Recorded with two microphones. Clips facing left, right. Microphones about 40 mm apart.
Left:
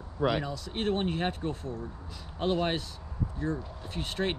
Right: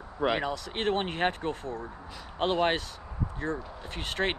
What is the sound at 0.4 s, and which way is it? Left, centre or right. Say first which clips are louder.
Speech: right 2 dB; right.